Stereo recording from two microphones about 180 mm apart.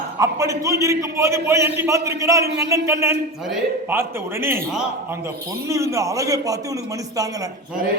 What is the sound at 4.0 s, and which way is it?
A man's voice, 15° right (ahead or behind).